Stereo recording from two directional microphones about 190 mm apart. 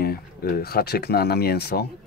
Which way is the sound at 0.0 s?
55° left (ahead or behind).